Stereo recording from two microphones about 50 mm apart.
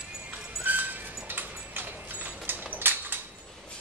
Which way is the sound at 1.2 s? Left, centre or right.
Right.